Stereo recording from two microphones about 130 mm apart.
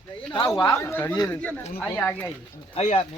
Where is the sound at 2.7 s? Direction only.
50° left (ahead or behind).